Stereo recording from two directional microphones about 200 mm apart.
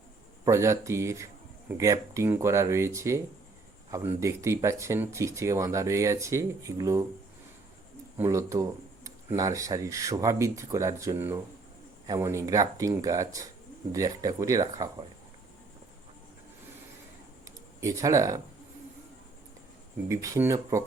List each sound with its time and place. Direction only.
0.4 s speech: 15° right (ahead or behind)
8.2 s speech: 15° right (ahead or behind)
17.7 s speech: 15° right (ahead or behind)
20.1 s speech: 15° right (ahead or behind)